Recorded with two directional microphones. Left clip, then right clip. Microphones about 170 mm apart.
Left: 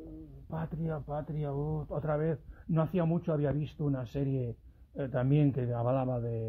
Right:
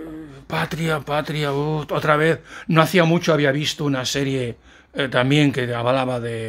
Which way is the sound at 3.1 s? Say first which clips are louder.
Right 15 dB; 65° right (ahead or behind).